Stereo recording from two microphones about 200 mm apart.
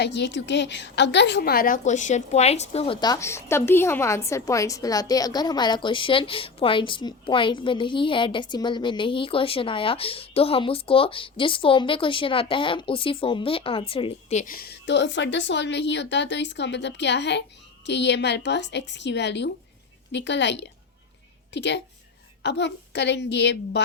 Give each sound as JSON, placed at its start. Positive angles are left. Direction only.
{"t": 0.0, "sound": "a woman's voice", "side_deg": 60}